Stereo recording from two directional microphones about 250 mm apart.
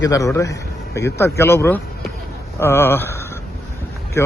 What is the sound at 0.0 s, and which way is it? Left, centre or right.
Speech, centre.